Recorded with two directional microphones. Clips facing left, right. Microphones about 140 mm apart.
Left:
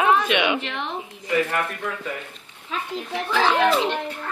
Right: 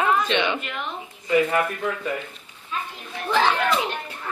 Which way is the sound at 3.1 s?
85° left.